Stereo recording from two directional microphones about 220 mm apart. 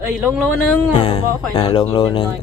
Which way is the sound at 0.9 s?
25° left (ahead or behind).